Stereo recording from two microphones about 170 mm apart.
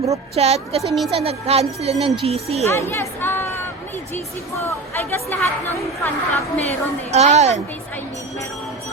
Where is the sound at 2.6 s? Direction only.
15° left (ahead or behind).